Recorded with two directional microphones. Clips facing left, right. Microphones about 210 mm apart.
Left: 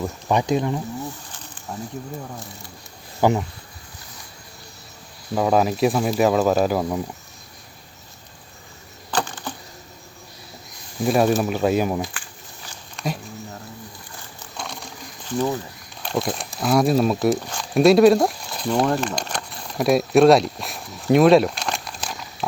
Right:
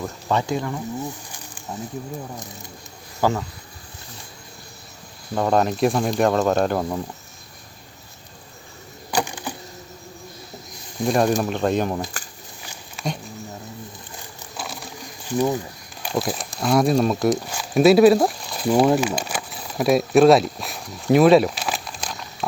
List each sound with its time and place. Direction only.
0.0 s speech: 15° left (ahead or behind)
1.3 s snake: 10° right (ahead or behind)
3.2 s speech: 20° left (ahead or behind)
5.3 s speech: 5° left (ahead or behind)
9.1 s a sound: 10° right (ahead or behind)
11.0 s speech: 5° left (ahead or behind)
13.0 s a sound: 5° right (ahead or behind)
14.5 s a sound: 5° right (ahead or behind)
15.3 s speech: 15° right (ahead or behind)